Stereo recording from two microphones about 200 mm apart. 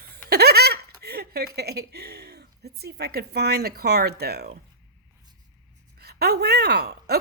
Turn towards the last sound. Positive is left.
turn(degrees=-55)  # may be behind; listen again after turning